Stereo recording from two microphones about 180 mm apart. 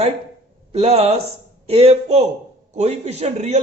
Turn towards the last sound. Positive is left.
turn(degrees=-40)  # may be behind; listen again after turning